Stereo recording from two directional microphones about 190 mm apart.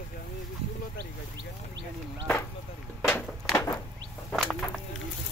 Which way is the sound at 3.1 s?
10° left (ahead or behind).